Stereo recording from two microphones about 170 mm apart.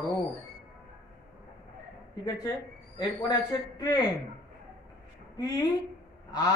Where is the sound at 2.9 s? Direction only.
20° left (ahead or behind).